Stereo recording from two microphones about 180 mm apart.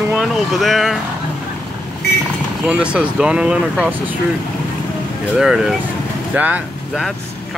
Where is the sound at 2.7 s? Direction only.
5° right (ahead or behind).